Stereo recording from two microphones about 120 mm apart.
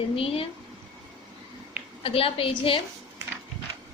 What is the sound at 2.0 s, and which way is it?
Speech, 50° left (ahead or behind).